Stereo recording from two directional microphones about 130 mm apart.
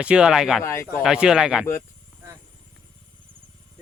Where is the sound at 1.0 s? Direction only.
5° right (ahead or behind).